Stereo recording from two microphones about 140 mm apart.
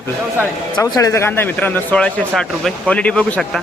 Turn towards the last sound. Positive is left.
turn(degrees=5)  # may be behind; listen again after turning